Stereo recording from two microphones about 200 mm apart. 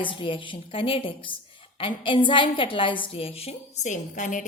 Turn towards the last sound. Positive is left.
turn(degrees=40)  # may be behind; listen again after turning